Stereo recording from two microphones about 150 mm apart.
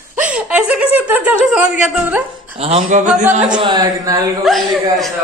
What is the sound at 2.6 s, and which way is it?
Speech, 40° right (ahead or behind).